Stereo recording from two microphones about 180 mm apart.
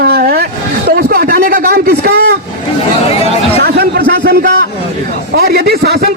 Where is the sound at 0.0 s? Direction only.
60° right (ahead or behind).